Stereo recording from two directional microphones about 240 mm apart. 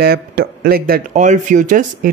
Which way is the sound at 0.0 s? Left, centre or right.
Right.